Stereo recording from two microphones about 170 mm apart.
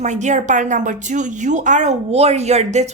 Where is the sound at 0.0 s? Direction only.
45° right (ahead or behind).